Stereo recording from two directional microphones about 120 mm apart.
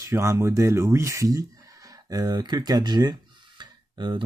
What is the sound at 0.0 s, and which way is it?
Speech, 25° right (ahead or behind).